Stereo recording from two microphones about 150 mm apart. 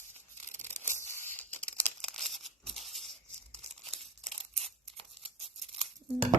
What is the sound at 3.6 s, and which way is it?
Crumpling, 40° right (ahead or behind).